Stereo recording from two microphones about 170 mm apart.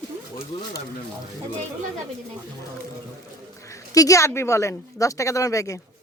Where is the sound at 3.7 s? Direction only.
20° left (ahead or behind).